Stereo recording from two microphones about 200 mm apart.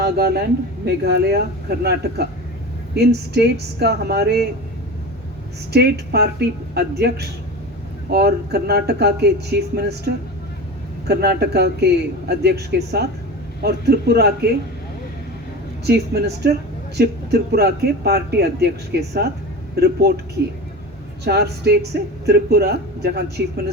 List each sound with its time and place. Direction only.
0.0 s a man's voice: 50° right (ahead or behind)
5.7 s speech: 55° right (ahead or behind)
11.1 s a man's voice: 55° right (ahead or behind)
15.9 s speech: 55° right (ahead or behind)
21.2 s a man's voice: 55° right (ahead or behind)